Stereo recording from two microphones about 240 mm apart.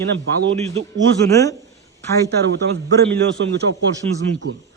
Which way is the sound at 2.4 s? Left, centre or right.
Right.